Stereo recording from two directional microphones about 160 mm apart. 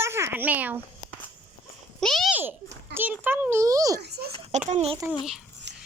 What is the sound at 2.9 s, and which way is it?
A child's voice, 10° right (ahead or behind).